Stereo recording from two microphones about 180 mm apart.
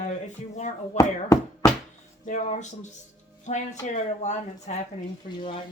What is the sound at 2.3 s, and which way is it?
Speech, 40° left (ahead or behind).